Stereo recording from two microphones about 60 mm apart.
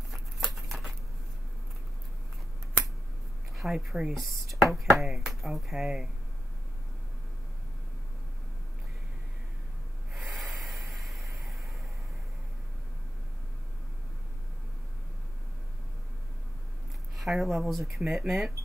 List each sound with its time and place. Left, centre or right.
0.1 s a sound: centre
3.5 s speech: centre
10.1 s rub: centre
17.2 s speech: centre